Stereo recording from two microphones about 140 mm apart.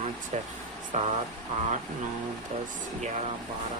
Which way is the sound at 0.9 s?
60° right (ahead or behind).